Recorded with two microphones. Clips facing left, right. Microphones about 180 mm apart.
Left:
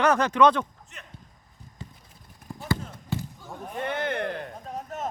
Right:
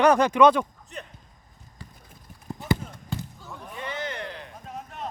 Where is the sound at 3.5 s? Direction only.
50° left (ahead or behind).